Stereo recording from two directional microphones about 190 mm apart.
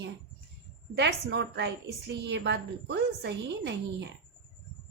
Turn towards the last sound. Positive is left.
turn(degrees=-65)  # may be behind; listen again after turning